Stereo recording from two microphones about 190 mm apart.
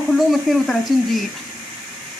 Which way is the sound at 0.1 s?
Centre (ahead or behind).